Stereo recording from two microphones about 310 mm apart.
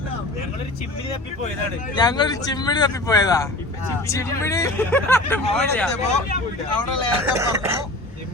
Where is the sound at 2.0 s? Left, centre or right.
Centre.